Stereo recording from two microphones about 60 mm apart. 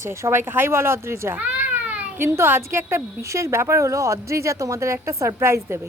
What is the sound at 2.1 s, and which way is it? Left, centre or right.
A woman's voice, right.